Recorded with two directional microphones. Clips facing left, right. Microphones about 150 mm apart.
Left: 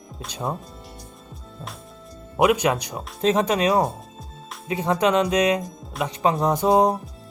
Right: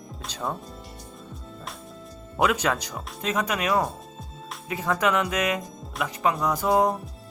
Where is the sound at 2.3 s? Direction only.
15° left (ahead or behind).